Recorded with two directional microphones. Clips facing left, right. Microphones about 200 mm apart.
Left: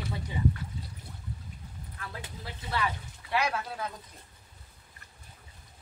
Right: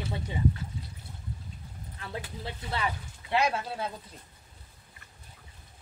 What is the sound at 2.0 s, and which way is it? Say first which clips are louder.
Speech: right 5 dB; 25° right (ahead or behind).